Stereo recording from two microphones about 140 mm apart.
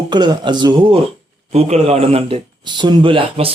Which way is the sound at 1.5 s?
50° right (ahead or behind).